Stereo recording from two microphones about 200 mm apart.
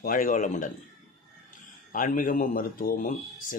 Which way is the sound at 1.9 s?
40° left (ahead or behind).